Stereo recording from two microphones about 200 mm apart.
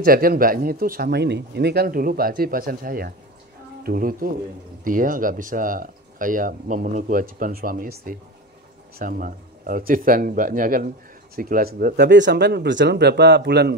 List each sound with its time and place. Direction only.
0.0 s speech: 45° right (ahead or behind)